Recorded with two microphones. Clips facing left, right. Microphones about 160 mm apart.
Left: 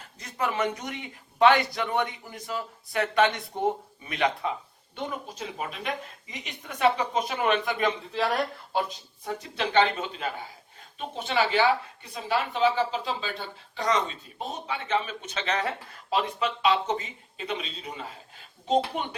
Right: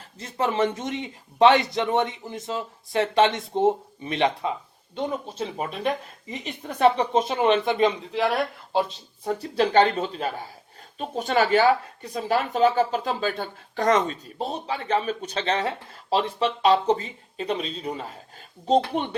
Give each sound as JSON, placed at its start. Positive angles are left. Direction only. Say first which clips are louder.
{"t": 0.2, "sound": "a man's voice", "louder": "right 5 dB", "side_deg": -30}
{"t": 9.2, "sound": "speech", "louder": "right 8 dB", "side_deg": -35}
{"t": 14.3, "sound": "speech", "louder": "right 4 dB", "side_deg": -35}